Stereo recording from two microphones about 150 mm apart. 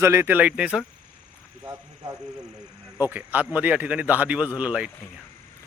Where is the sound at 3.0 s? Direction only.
10° right (ahead or behind).